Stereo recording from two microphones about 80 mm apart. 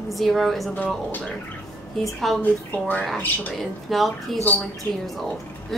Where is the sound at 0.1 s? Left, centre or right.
Centre.